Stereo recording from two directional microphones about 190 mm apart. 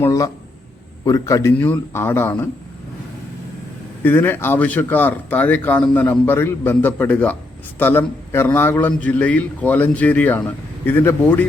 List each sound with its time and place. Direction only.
0.0 s a man's voice: 15° left (ahead or behind)
4.0 s a man's voice: 10° left (ahead or behind)